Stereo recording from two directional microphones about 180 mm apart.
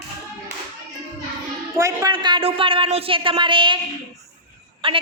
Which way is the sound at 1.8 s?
15° right (ahead or behind).